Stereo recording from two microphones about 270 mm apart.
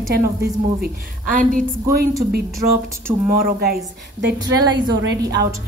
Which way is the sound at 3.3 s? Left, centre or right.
Right.